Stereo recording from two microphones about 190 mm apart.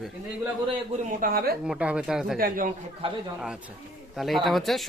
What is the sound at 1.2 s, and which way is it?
Speech, 50° right (ahead or behind).